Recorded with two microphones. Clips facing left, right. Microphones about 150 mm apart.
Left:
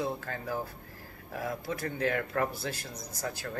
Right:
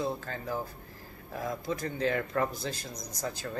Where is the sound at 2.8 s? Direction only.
15° right (ahead or behind).